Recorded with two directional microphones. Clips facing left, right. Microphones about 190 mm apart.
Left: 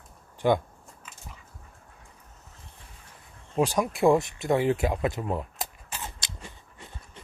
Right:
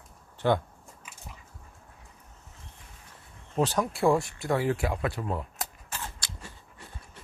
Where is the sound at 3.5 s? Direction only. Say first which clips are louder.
Left 2 dB; 10° left (ahead or behind).